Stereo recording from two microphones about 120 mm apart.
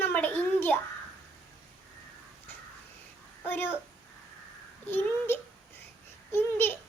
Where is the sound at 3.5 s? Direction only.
15° left (ahead or behind).